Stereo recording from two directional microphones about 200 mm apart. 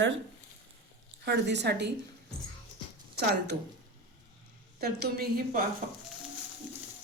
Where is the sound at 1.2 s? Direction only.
60° right (ahead or behind).